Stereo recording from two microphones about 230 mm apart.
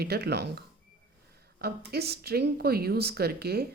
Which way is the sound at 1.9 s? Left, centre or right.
Right.